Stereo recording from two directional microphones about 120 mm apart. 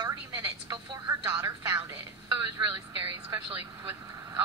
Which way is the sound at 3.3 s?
15° right (ahead or behind).